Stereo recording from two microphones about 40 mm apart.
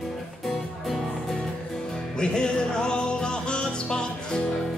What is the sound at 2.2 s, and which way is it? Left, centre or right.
Music, centre.